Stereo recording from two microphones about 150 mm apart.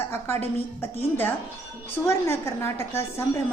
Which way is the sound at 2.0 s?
20° left (ahead or behind).